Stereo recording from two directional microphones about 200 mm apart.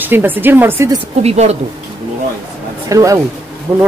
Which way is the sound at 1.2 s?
30° right (ahead or behind).